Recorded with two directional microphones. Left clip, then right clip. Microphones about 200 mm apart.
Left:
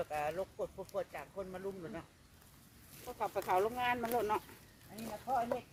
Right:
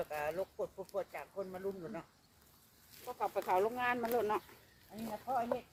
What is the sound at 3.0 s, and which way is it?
Speech, 5° right (ahead or behind).